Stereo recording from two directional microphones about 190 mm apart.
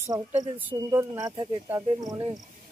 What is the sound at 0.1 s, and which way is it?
Speech, 10° right (ahead or behind).